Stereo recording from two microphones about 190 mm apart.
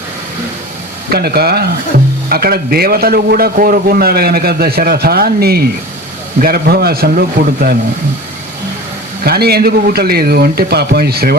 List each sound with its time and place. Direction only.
1.1 s a man's voice: 55° right (ahead or behind)
9.2 s speech: 55° right (ahead or behind)